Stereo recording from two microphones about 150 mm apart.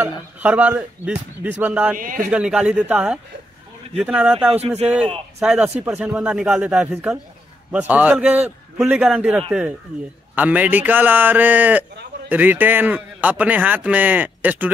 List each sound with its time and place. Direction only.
0.4 s a man's voice: 10° right (ahead or behind)
2.0 s a man's voice: 65° right (ahead or behind)
2.3 s a man's voice: 5° right (ahead or behind)
4.6 s a man's voice: 45° right (ahead or behind)
5.4 s a man's voice: 5° right (ahead or behind)